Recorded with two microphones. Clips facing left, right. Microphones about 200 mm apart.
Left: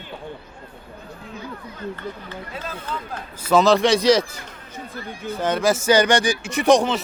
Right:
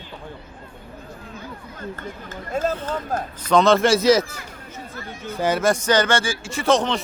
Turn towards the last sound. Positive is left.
turn(degrees=10)  # may be behind; listen again after turning